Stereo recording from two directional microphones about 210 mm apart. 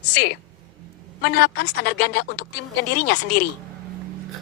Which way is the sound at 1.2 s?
55° left (ahead or behind).